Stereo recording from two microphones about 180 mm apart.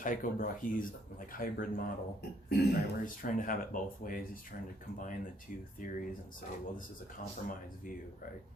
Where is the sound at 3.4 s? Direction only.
50° left (ahead or behind).